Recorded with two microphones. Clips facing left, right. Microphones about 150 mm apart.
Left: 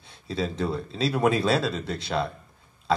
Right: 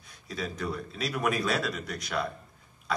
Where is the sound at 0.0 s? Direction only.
25° left (ahead or behind).